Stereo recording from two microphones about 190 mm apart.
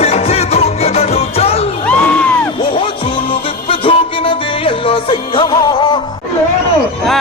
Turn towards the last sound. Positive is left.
turn(degrees=25)  # may be behind; listen again after turning